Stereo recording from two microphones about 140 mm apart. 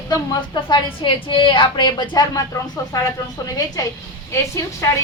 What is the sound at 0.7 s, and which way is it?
A woman's voice, 35° left (ahead or behind).